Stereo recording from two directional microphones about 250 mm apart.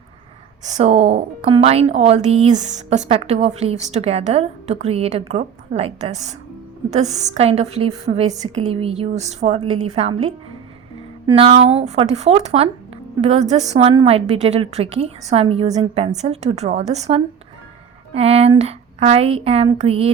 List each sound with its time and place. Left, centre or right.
0.6 s a woman's voice: right